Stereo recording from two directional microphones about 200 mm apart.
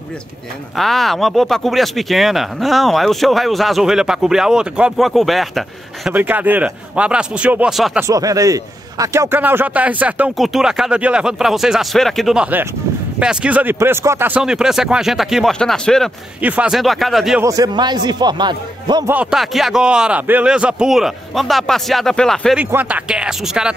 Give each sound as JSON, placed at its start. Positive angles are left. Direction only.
{"t": 0.7, "sound": "speech", "side_deg": 0}
{"t": 8.1, "sound": "a man's voice", "side_deg": -15}
{"t": 17.4, "sound": "a man's voice", "side_deg": -15}
{"t": 19.1, "sound": "speech", "side_deg": 0}